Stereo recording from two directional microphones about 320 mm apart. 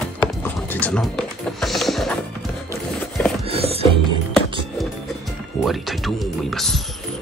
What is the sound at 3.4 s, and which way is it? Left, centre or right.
Music, centre.